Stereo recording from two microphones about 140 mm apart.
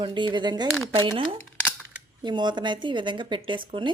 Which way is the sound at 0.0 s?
35° right (ahead or behind).